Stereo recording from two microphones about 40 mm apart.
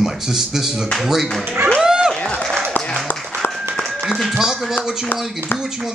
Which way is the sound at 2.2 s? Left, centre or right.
Left.